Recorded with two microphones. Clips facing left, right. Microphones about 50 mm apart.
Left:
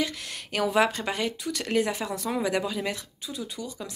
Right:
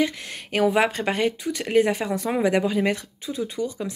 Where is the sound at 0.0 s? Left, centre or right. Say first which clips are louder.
Right 6 dB; right.